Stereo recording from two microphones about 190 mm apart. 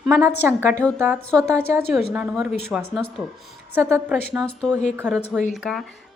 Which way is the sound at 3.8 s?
10° right (ahead or behind).